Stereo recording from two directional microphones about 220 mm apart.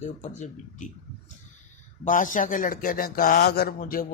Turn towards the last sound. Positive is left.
turn(degrees=40)  # may be behind; listen again after turning